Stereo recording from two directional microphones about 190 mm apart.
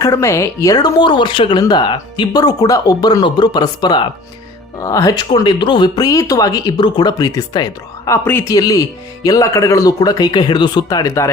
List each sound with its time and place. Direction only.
0.0 s speech: 15° left (ahead or behind)